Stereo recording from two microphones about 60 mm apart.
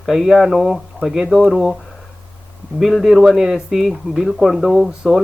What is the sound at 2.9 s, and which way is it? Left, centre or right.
Speech, centre.